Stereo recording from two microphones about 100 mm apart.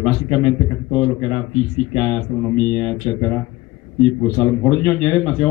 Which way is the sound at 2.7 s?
15° left (ahead or behind).